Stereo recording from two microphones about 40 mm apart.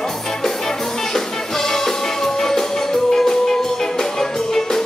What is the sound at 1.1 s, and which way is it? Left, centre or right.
Music, centre.